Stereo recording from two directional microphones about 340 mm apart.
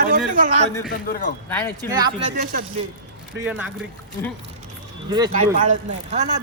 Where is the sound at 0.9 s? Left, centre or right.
Left.